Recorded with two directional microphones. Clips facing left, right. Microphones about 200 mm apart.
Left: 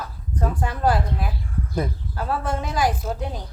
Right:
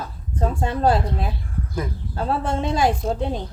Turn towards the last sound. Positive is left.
turn(degrees=-25)  # may be behind; listen again after turning